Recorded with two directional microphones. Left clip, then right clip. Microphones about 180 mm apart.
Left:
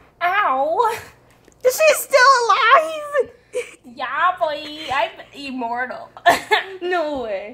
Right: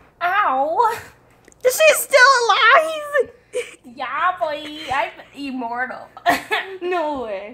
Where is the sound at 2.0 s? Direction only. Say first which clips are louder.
Even; 15° right (ahead or behind).